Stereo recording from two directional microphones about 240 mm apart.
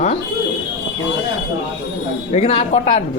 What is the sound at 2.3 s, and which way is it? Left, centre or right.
Speech, left.